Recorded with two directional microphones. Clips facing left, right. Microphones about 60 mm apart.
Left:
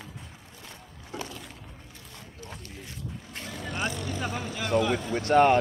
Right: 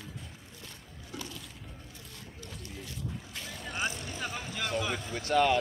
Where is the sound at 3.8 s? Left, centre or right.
Left.